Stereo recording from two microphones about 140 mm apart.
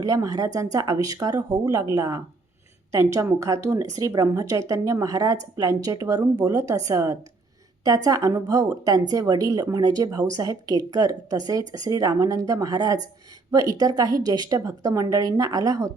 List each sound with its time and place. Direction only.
0.0 s speech: 25° right (ahead or behind)